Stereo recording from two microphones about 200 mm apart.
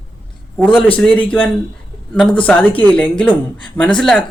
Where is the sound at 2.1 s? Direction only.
5° left (ahead or behind).